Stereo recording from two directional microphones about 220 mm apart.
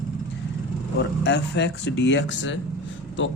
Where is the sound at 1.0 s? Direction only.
50° left (ahead or behind).